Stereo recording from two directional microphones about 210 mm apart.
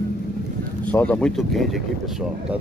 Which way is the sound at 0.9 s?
5° left (ahead or behind).